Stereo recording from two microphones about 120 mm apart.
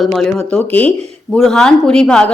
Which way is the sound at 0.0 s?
Centre (ahead or behind).